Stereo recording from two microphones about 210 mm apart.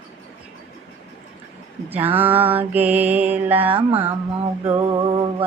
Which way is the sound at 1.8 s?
10° right (ahead or behind).